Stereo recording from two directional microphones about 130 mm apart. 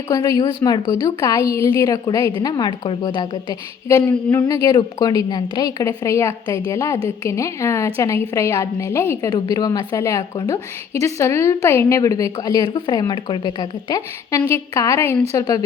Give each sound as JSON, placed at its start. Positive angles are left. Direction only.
{"t": 0.1, "sound": "a woman's voice", "side_deg": 30}
{"t": 3.8, "sound": "a woman's voice", "side_deg": 20}